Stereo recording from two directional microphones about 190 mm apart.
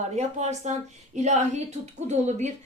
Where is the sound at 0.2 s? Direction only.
35° right (ahead or behind).